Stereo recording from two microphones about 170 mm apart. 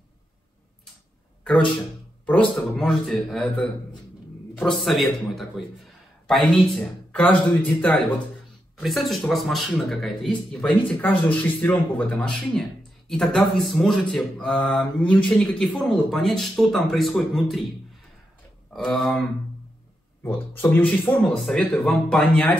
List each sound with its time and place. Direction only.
2.2 s a man's voice: 5° left (ahead or behind)
18.7 s speech: 5° left (ahead or behind)
20.2 s a man's voice: 10° left (ahead or behind)